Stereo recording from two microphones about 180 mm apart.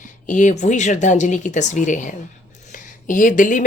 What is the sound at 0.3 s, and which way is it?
Speech, 45° left (ahead or behind).